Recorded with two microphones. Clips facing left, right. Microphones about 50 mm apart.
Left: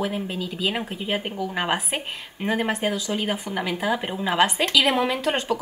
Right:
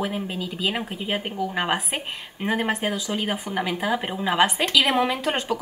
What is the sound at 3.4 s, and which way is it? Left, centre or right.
Speech, centre.